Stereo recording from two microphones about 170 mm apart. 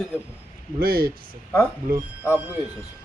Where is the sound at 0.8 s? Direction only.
60° right (ahead or behind).